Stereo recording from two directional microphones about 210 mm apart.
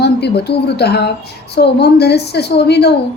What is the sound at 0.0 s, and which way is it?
A woman's voice, 50° left (ahead or behind).